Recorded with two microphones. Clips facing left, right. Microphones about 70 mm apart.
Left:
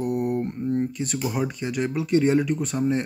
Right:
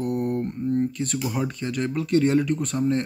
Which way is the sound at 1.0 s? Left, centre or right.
Centre.